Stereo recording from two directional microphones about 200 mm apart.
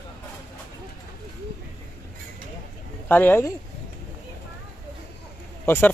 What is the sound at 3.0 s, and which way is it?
Speech, 10° left (ahead or behind).